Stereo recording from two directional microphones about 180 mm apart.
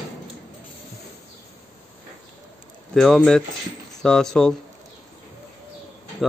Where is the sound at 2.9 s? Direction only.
Centre (ahead or behind).